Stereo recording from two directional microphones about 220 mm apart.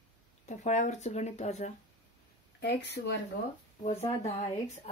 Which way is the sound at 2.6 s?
50° left (ahead or behind).